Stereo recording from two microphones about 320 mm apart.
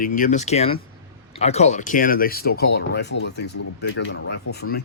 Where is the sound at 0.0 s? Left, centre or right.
Left.